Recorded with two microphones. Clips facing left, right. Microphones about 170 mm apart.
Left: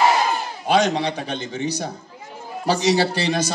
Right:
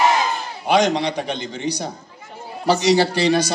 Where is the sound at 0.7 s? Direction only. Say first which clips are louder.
Right 2 dB; 15° right (ahead or behind).